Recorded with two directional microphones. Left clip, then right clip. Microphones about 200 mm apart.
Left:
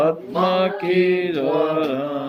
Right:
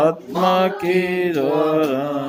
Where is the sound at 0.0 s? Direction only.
15° right (ahead or behind).